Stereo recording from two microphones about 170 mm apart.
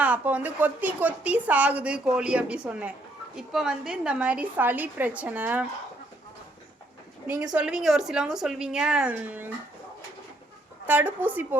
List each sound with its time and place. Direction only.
0.0 s a woman's voice: 10° right (ahead or behind)
7.3 s a woman's voice: 20° right (ahead or behind)
7.5 s a woman's voice: 5° right (ahead or behind)
10.8 s a woman's voice: 10° right (ahead or behind)